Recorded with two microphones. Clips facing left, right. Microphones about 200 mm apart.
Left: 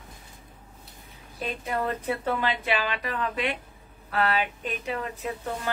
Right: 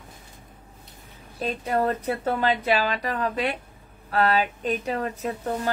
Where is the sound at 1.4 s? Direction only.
40° right (ahead or behind).